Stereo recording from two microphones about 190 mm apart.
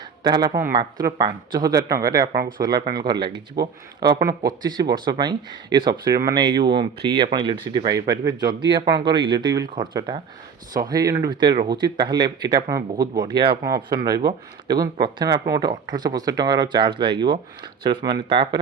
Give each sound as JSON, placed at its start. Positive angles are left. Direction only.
{"t": 0.2, "sound": "speech", "side_deg": -20}